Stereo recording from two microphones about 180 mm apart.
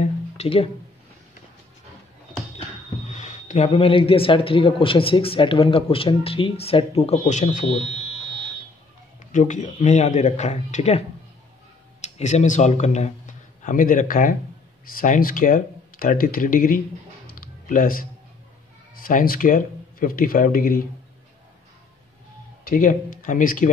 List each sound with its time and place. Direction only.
0.4 s speech: 30° left (ahead or behind)
3.1 s speech: 40° left (ahead or behind)
9.3 s speech: 45° left (ahead or behind)
17.3 s computer keyboard: 50° left (ahead or behind)
18.9 s speech: 50° left (ahead or behind)
22.7 s speech: 50° left (ahead or behind)